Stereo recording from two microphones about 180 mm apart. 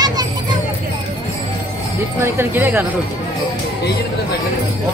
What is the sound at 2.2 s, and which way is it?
Speech, 15° right (ahead or behind).